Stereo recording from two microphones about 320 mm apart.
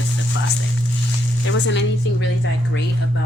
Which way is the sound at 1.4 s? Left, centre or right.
Left.